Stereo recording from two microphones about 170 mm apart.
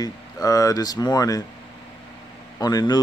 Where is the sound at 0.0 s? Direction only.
20° left (ahead or behind).